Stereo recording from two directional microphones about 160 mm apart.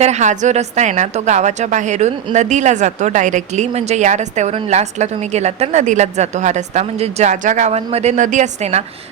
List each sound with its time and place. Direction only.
0.0 s a woman's voice: 45° right (ahead or behind)